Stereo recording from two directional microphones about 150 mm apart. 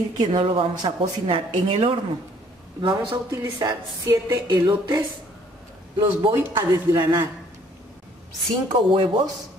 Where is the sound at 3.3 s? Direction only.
20° right (ahead or behind).